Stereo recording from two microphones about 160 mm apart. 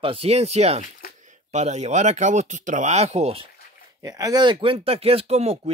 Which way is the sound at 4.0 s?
20° right (ahead or behind).